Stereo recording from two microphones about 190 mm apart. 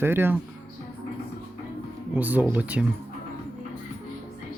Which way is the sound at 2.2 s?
10° right (ahead or behind).